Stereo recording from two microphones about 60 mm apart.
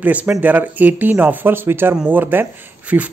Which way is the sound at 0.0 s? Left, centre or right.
Right.